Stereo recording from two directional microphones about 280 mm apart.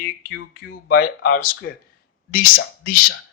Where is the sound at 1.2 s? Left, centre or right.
Left.